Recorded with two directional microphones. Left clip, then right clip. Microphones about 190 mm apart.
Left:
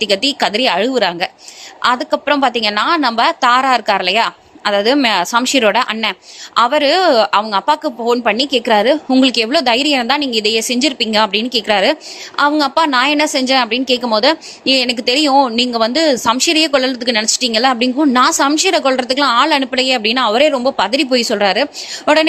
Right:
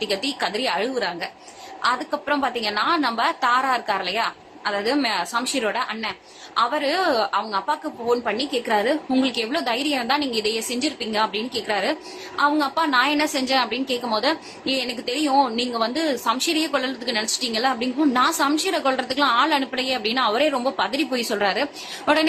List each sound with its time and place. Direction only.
0.0 s a woman's voice: 45° left (ahead or behind)